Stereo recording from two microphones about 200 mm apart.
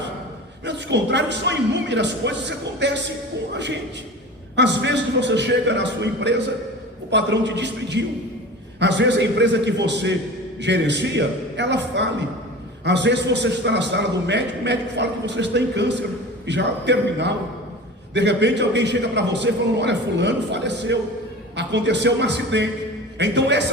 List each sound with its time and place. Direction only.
0.6 s a man's voice: 60° right (ahead or behind)